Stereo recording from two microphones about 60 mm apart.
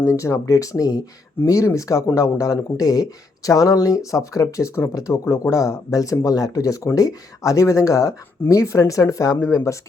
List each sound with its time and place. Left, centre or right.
0.1 s speech: left
1.5 s speech: left
4.9 s speech: left